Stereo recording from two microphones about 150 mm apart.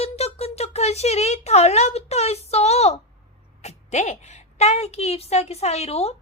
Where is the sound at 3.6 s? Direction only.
45° left (ahead or behind).